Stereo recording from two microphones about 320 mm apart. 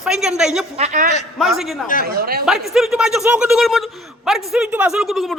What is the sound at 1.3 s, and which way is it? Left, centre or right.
Speech, centre.